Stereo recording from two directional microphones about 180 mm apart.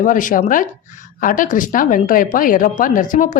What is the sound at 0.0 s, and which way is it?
A woman's voice, 45° left (ahead or behind).